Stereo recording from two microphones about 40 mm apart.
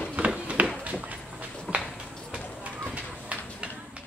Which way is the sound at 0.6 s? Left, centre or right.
Right.